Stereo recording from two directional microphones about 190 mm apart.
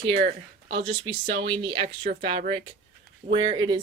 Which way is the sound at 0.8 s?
30° right (ahead or behind).